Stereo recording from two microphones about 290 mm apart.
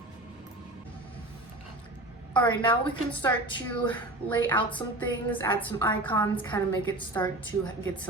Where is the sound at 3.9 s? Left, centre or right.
Centre.